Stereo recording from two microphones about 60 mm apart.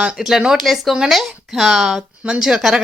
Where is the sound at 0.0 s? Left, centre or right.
Centre.